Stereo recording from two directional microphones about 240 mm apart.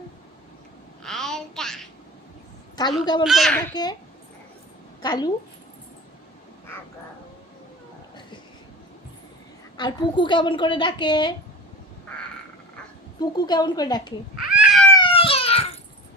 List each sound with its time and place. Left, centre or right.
1.0 s babbling: centre
2.7 s a woman's voice: centre
3.2 s a child's voice: centre
5.0 s a woman's voice: centre
9.7 s a woman's voice: centre
13.1 s a woman's voice: centre
14.5 s cat: centre
14.9 s a sound: left